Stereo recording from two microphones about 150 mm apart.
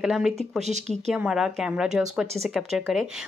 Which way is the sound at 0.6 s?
50° right (ahead or behind).